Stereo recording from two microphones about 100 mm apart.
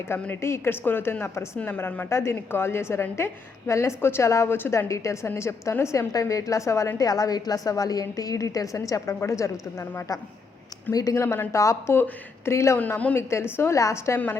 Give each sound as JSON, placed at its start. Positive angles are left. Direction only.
{"t": 0.1, "sound": "a woman's voice", "side_deg": 25}
{"t": 2.0, "sound": "a woman's voice", "side_deg": 25}